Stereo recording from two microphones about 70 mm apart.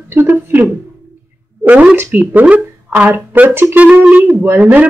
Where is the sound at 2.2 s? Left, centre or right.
Right.